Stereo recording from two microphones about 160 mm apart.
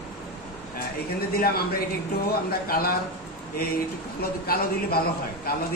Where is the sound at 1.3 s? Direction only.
70° left (ahead or behind).